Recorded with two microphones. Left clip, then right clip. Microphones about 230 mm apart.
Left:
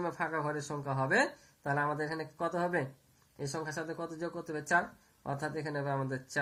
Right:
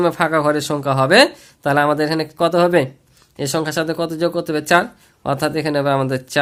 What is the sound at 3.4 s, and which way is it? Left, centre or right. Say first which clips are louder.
Speech: right 18 dB; right.